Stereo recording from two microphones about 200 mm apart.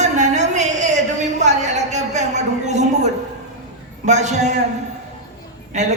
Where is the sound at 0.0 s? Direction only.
35° right (ahead or behind).